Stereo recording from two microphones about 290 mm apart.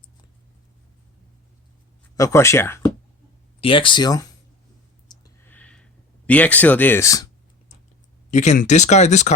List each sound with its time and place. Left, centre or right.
2.1 s speech: centre
5.0 s a sound: centre
6.2 s speech: centre
8.3 s speech: left